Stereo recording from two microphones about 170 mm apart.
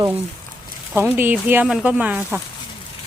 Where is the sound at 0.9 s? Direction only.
15° right (ahead or behind).